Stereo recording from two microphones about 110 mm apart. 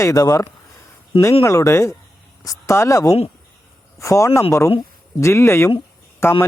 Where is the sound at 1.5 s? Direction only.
25° left (ahead or behind).